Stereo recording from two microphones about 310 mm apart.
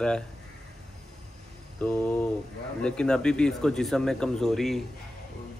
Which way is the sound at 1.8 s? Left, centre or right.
Centre.